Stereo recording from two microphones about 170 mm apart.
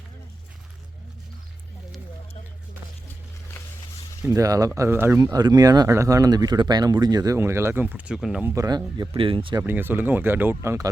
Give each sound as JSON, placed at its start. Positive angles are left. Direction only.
{"t": 4.3, "sound": "speech", "side_deg": -20}
{"t": 8.5, "sound": "speech", "side_deg": -20}
{"t": 9.0, "sound": "speech", "side_deg": -30}
{"t": 9.6, "sound": "speech", "side_deg": -10}